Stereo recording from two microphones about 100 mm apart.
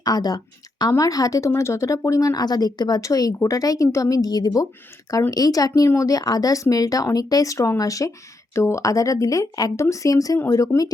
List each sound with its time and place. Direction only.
0.0 s speech: 40° left (ahead or behind)